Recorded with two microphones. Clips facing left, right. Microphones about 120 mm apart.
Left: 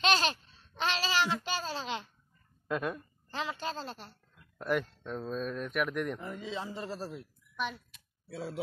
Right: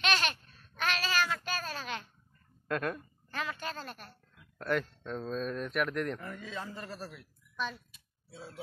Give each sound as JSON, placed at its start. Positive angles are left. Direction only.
{"t": 0.0, "sound": "a child's voice", "side_deg": 30}
{"t": 3.3, "sound": "a man's voice", "side_deg": 25}
{"t": 4.6, "sound": "speech", "side_deg": 5}
{"t": 6.2, "sound": "a man's voice", "side_deg": 20}
{"t": 7.5, "sound": "speech", "side_deg": 15}
{"t": 7.9, "sound": "a sound", "side_deg": 75}